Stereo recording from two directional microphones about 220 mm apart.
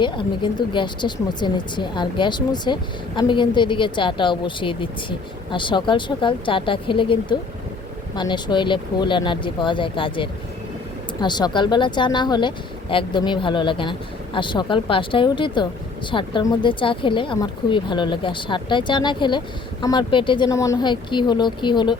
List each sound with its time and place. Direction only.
0.0 s a woman's voice: 20° left (ahead or behind)